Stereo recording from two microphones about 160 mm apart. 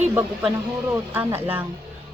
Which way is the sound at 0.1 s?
15° right (ahead or behind).